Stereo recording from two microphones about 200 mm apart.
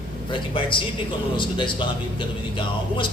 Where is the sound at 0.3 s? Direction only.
25° left (ahead or behind).